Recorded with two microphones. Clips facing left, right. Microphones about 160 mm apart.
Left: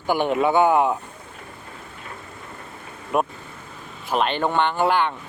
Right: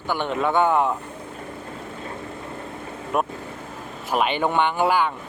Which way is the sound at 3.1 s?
Centre (ahead or behind).